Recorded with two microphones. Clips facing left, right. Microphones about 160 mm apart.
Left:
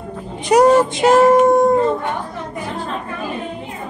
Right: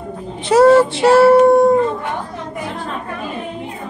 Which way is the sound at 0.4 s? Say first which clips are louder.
Right 2 dB; 15° left (ahead or behind).